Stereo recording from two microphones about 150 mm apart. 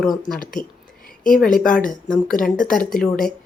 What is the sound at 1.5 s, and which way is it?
Speech, 65° left (ahead or behind).